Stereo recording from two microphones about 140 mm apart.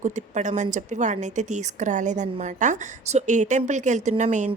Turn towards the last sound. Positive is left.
turn(degrees=-60)  # may be behind; listen again after turning